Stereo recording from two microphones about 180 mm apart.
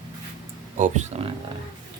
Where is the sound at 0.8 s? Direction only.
40° right (ahead or behind).